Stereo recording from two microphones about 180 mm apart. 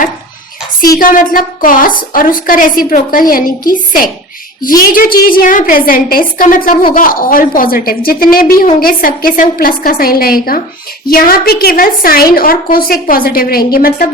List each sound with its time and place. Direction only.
0.9 s a woman's voice: 50° left (ahead or behind)